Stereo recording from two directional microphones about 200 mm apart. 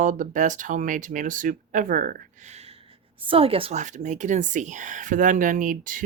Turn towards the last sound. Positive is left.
turn(degrees=-40)  # may be behind; listen again after turning